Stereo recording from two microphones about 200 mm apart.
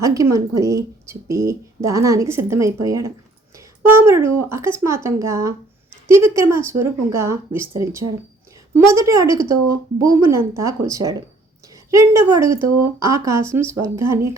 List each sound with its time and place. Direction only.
0.0 s a woman's voice: 15° right (ahead or behind)